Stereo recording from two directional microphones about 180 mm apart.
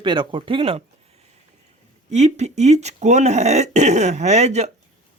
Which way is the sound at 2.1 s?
40° right (ahead or behind).